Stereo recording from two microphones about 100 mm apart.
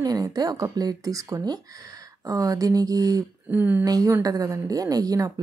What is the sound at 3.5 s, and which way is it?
Speech, 20° right (ahead or behind).